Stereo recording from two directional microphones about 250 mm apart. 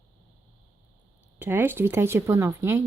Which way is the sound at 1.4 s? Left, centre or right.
Centre.